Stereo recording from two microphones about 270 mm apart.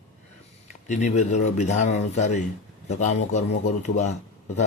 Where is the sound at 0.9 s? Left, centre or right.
Left.